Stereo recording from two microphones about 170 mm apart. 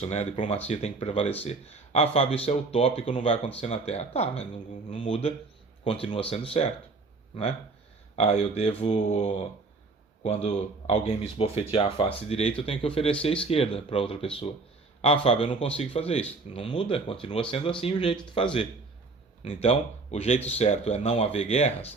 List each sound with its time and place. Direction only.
0.0 s speech: 40° left (ahead or behind)
8.1 s speech: 35° left (ahead or behind)
19.5 s speech: 40° left (ahead or behind)